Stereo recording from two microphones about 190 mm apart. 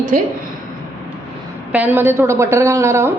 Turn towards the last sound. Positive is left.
turn(degrees=-15)  # may be behind; listen again after turning